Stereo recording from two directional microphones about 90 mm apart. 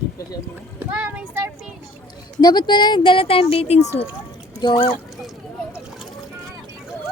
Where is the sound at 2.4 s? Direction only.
55° left (ahead or behind); by 4.0 s 90° left.